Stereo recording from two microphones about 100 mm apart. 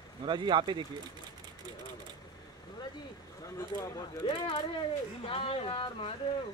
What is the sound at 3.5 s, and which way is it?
Speech, 35° left (ahead or behind).